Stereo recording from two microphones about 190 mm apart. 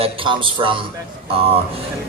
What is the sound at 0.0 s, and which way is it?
Speech, 25° right (ahead or behind).